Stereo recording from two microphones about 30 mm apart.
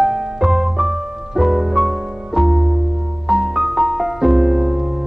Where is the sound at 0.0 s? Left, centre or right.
Centre.